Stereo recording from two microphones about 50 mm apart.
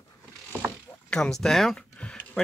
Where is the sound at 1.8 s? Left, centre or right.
Left.